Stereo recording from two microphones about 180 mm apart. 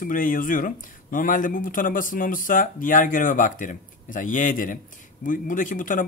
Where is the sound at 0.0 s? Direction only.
50° left (ahead or behind).